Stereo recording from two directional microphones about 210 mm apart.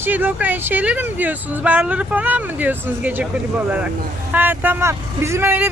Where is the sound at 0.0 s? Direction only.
10° right (ahead or behind).